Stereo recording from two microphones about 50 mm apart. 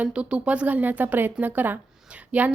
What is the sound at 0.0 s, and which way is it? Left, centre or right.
A woman's voice, right.